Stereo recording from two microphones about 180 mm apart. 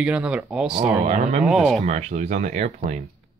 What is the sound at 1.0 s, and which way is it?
Speech, 35° right (ahead or behind).